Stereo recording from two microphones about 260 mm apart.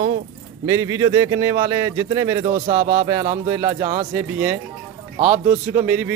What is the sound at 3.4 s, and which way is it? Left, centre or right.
Speech, centre.